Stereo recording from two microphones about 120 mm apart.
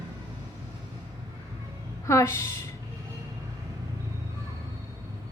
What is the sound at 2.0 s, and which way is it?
Speech, 25° left (ahead or behind).